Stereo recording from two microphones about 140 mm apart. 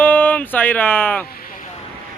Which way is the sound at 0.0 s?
10° left (ahead or behind).